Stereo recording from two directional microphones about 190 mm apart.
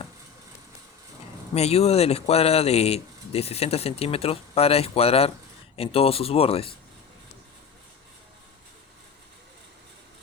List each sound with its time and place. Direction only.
1.5 s speech: 35° left (ahead or behind)